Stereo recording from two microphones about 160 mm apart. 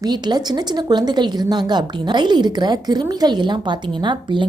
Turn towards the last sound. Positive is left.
turn(degrees=-30)  # may be behind; listen again after turning